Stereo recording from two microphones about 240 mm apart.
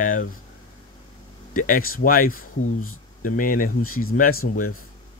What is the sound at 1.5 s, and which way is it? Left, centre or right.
Speech, left.